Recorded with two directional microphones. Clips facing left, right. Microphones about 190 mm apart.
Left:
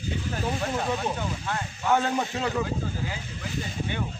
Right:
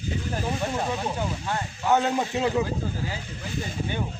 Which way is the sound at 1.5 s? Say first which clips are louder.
Right 1 dB; 20° right (ahead or behind).